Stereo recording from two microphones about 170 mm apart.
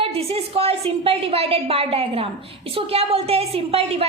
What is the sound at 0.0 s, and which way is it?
A woman's voice, 35° right (ahead or behind).